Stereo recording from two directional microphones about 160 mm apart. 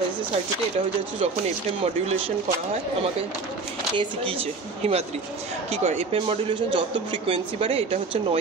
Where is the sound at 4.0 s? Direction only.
35° right (ahead or behind).